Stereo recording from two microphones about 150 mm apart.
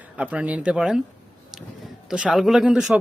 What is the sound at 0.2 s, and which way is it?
Speech, 10° right (ahead or behind).